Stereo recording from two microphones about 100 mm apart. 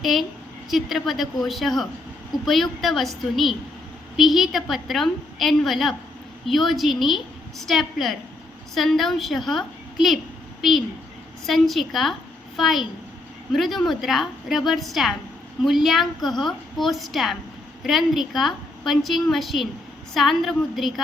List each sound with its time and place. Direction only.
0.0 s a woman's voice: centre (ahead or behind)